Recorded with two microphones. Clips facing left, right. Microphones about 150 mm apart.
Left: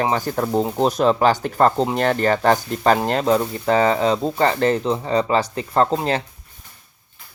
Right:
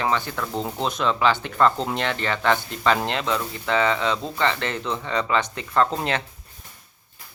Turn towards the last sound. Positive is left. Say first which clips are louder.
# left 4 dB
turn(degrees=35)  # may be behind; listen again after turning